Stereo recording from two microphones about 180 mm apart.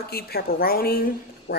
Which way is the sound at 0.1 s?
60° left (ahead or behind).